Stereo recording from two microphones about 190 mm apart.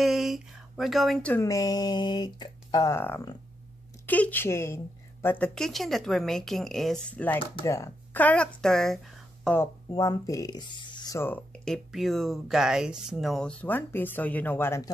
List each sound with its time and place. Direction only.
0.0 s speech: centre (ahead or behind)
1.4 s a woman's voice: 20° left (ahead or behind)
9.8 s speech: 15° left (ahead or behind)